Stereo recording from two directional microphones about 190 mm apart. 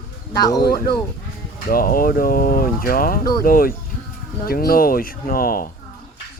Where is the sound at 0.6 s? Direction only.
50° left (ahead or behind).